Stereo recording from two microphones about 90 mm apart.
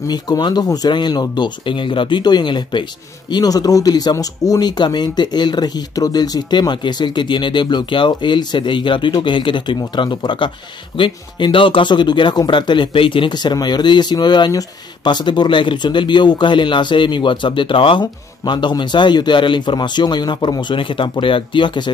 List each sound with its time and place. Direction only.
0.1 s speech: 50° left (ahead or behind); by 18.0 s 70° left (ahead or behind)
18.4 s speech: 60° left (ahead or behind)